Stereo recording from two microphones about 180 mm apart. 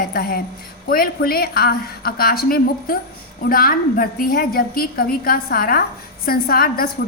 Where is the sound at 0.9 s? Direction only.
55° left (ahead or behind).